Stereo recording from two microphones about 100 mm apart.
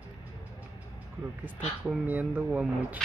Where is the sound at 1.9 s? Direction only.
20° right (ahead or behind).